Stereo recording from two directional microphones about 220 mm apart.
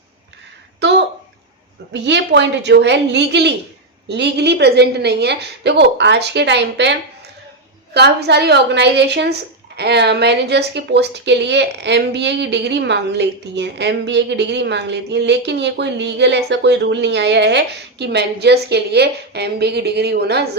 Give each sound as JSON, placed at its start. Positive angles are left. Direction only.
{"t": 0.8, "sound": "a sound", "side_deg": -50}
{"t": 1.9, "sound": "speech", "side_deg": -50}
{"t": 7.9, "sound": "speech", "side_deg": -50}